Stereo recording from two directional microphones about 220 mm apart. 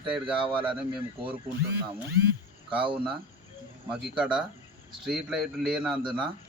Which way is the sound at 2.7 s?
20° right (ahead or behind).